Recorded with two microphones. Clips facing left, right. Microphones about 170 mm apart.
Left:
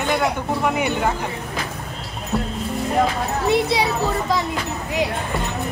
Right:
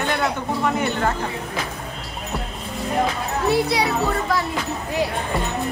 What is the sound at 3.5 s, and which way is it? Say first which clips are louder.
Speech: left 1 dB; 25° left (ahead or behind).